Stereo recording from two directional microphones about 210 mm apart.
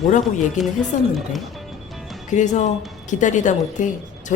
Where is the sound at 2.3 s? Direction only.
35° left (ahead or behind).